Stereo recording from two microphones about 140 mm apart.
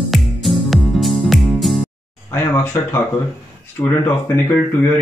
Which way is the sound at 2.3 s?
15° left (ahead or behind).